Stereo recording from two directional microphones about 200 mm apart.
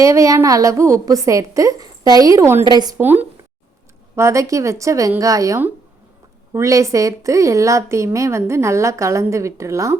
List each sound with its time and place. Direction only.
0.0 s a woman's voice: 15° right (ahead or behind)
3.0 s a woman's voice: 10° right (ahead or behind)